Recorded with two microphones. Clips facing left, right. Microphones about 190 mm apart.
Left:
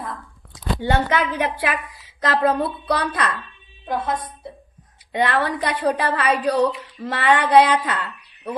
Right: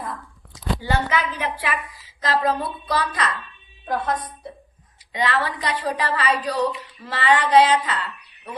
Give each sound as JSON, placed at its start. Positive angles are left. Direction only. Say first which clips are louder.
{"t": 0.8, "sound": "speech", "louder": "left 4 dB", "side_deg": 60}
{"t": 3.9, "sound": "a woman's voice", "louder": "even", "side_deg": 25}
{"t": 5.1, "sound": "a woman's voice", "louder": "left 3 dB", "side_deg": 60}